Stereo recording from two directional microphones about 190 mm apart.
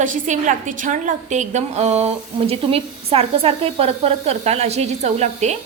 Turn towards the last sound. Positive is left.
turn(degrees=-35)  # may be behind; listen again after turning